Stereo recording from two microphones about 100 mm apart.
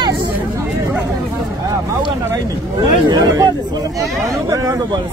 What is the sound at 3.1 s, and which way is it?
Speech, 40° right (ahead or behind).